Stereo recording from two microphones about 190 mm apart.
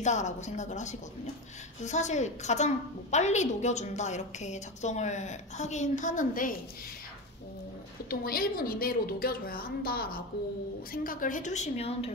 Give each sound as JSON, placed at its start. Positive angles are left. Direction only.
{"t": 0.0, "sound": "a woman's voice", "side_deg": 40}
{"t": 8.1, "sound": "a woman's voice", "side_deg": 50}